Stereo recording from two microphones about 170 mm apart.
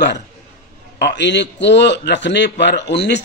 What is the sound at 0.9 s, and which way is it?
A man's voice, 90° left.